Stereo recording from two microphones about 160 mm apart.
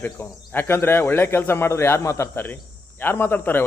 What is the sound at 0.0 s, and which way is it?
Speech, 15° left (ahead or behind).